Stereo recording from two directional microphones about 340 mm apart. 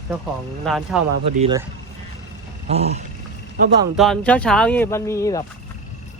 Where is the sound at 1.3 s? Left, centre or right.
Centre.